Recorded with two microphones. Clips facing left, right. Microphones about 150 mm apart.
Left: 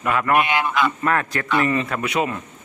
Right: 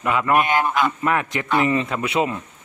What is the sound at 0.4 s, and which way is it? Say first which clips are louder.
Speech: right 1 dB; 45° right (ahead or behind).